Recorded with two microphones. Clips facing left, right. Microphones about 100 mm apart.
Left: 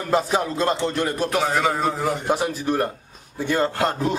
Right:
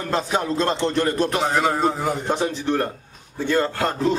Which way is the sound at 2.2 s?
10° left (ahead or behind).